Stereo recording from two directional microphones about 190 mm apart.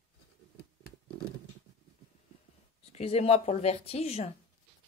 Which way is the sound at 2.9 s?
30° left (ahead or behind).